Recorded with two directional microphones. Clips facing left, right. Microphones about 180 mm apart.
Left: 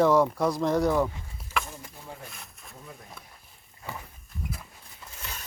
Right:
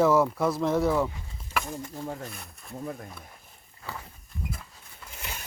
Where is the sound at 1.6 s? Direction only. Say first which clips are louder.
Even; centre (ahead or behind).